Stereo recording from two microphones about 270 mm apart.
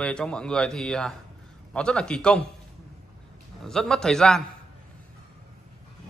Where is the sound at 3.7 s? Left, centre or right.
Centre.